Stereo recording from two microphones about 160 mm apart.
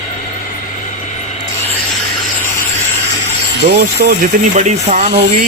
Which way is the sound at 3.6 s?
85° right.